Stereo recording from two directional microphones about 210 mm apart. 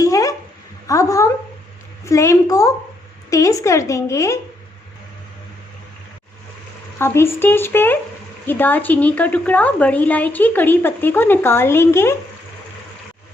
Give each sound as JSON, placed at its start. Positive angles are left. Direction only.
{"t": 0.0, "sound": "a sound", "side_deg": 15}
{"t": 0.9, "sound": "a woman's voice", "side_deg": 15}
{"t": 7.0, "sound": "a woman's voice", "side_deg": 10}